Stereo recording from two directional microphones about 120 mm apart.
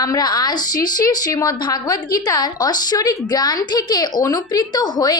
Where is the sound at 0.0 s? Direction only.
35° left (ahead or behind).